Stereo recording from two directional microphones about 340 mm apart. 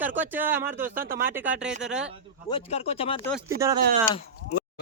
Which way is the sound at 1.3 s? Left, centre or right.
Centre.